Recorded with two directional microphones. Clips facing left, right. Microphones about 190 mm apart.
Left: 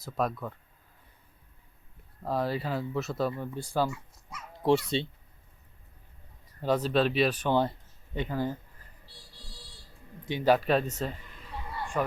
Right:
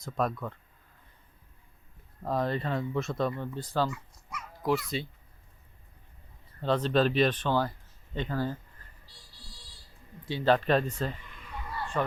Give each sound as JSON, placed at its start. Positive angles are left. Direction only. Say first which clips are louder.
{"t": 0.0, "sound": "speech", "louder": "even", "side_deg": 0}
{"t": 2.2, "sound": "speech", "louder": "even", "side_deg": 5}
{"t": 3.9, "sound": "speech", "louder": "right 2 dB", "side_deg": 25}
{"t": 6.6, "sound": "speech", "louder": "even", "side_deg": 10}
{"t": 7.5, "sound": "speech", "louder": "left 2 dB", "side_deg": 25}
{"t": 8.1, "sound": "speech", "louder": "left 1 dB", "side_deg": 15}
{"t": 10.2, "sound": "speech", "louder": "left 1 dB", "side_deg": 15}
{"t": 11.4, "sound": "a sound", "louder": "even", "side_deg": 25}